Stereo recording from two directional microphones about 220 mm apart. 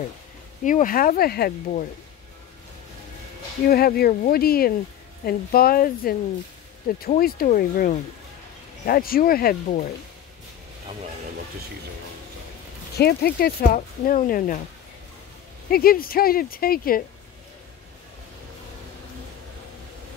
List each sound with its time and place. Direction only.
0.7 s speech: 35° left (ahead or behind)
3.6 s speech: 45° left (ahead or behind)
12.9 s speech: 45° left (ahead or behind)
15.7 s speech: 40° left (ahead or behind)